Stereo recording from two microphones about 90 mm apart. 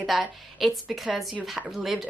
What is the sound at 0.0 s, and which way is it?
Speech, centre (ahead or behind).